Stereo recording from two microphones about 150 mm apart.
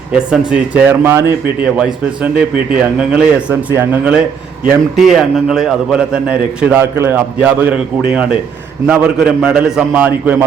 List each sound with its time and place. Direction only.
0.3 s speech: 10° right (ahead or behind)